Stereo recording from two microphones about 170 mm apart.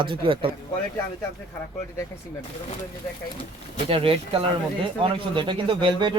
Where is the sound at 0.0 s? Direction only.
30° right (ahead or behind).